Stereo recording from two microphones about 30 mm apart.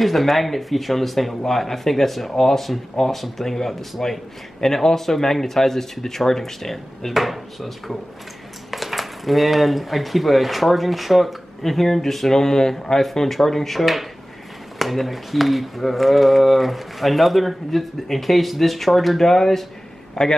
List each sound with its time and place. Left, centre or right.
0.0 s speech: centre
4.0 s speech: centre
7.2 s speech: centre
11.6 s speech: centre
13.0 s speech: centre